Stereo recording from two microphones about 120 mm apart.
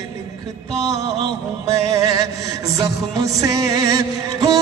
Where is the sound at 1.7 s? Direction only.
30° right (ahead or behind).